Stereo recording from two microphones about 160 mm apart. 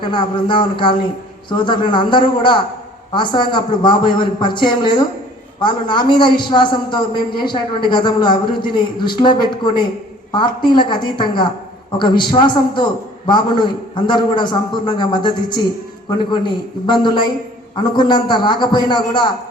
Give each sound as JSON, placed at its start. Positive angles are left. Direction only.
{"t": 0.0, "sound": "a man's voice", "side_deg": 30}